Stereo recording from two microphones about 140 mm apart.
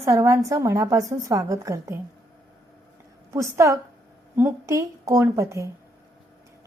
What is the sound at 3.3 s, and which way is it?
A woman's voice, 20° right (ahead or behind).